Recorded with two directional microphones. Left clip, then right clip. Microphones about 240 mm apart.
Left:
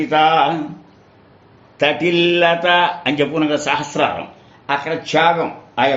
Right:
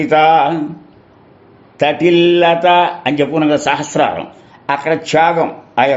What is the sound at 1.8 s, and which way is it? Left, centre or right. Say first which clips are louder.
Speech: right 4 dB; right.